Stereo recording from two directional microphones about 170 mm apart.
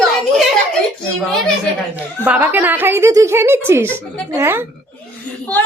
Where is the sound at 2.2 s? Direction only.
10° right (ahead or behind).